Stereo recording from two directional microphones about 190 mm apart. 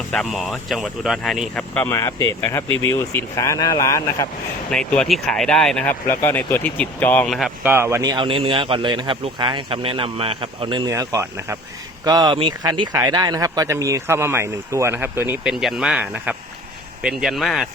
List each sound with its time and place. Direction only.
0.1 s speech: centre (ahead or behind); by 4.3 s 15° left (ahead or behind)
4.7 s speech: 5° left (ahead or behind)